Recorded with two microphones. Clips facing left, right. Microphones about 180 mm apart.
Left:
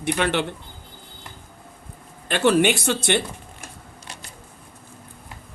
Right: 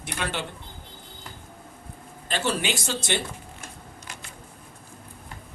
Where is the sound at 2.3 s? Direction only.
60° left (ahead or behind).